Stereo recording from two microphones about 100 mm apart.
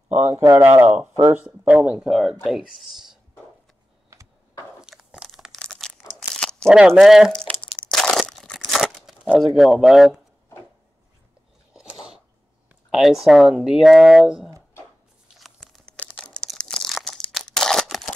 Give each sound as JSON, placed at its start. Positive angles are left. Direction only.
{"t": 0.1, "sound": "speech", "side_deg": -20}
{"t": 4.8, "sound": "crunch", "side_deg": -5}
{"t": 5.6, "sound": "crumpling", "side_deg": 5}
{"t": 6.3, "sound": "a sound", "side_deg": 5}
{"t": 6.9, "sound": "speech", "side_deg": 0}
{"t": 7.3, "sound": "a sound", "side_deg": 10}
{"t": 7.9, "sound": "crunch", "side_deg": 0}
{"t": 9.5, "sound": "speech", "side_deg": -5}
{"t": 11.7, "sound": "chewing", "side_deg": -5}
{"t": 12.9, "sound": "speech", "side_deg": -5}
{"t": 15.3, "sound": "crunch", "side_deg": 0}
{"t": 16.0, "sound": "crumpling", "side_deg": 10}
{"t": 17.8, "sound": "scissors", "side_deg": 0}